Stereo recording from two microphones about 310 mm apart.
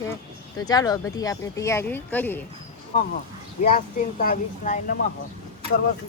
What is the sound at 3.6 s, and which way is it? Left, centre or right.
Speech, left.